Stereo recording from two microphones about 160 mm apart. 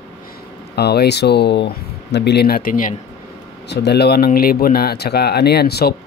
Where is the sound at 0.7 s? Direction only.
90° left; by 3.0 s 55° left (ahead or behind).